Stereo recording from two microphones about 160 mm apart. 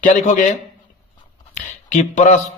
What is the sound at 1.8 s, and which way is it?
Speech, 50° left (ahead or behind).